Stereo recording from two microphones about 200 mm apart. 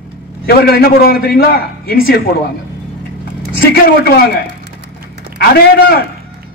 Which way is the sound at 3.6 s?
50° left (ahead or behind).